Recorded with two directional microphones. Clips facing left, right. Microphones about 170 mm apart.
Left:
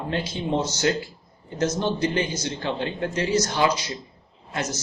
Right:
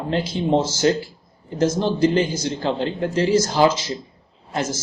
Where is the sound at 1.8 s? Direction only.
30° right (ahead or behind).